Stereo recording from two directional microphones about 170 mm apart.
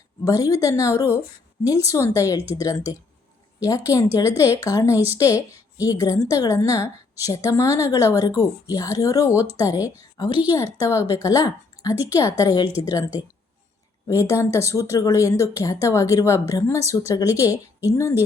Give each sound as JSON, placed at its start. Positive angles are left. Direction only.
{"t": 0.3, "sound": "a woman's voice", "side_deg": 20}
{"t": 14.1, "sound": "a woman's voice", "side_deg": 15}